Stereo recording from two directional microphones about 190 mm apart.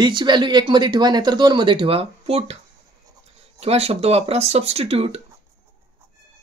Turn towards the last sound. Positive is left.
turn(degrees=-30)  # may be behind; listen again after turning